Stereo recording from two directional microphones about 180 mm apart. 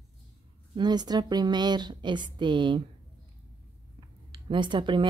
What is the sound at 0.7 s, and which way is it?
A woman's voice, 25° right (ahead or behind).